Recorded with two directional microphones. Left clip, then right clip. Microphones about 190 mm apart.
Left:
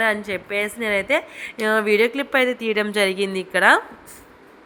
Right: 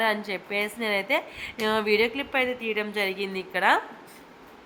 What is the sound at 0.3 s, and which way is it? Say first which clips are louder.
A woman's voice: left 5 dB; 15° left (ahead or behind).